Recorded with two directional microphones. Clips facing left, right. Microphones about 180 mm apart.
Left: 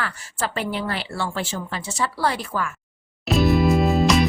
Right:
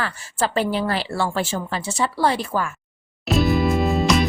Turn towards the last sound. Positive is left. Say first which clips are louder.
# left 1 dB
turn(degrees=0)  # may be behind; listen again after turning